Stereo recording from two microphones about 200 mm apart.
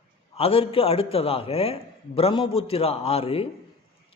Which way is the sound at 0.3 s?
30° left (ahead or behind).